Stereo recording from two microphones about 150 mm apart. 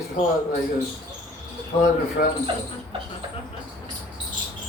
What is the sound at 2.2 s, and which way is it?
Speech, 90° left.